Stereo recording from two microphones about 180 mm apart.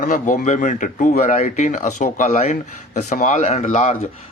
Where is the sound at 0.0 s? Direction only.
45° left (ahead or behind).